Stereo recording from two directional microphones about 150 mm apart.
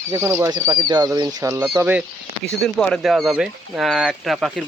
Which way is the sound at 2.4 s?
5° left (ahead or behind).